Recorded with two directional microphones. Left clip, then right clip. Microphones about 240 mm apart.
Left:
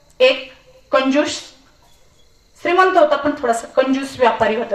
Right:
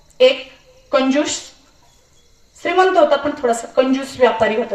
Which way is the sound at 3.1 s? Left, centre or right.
Left.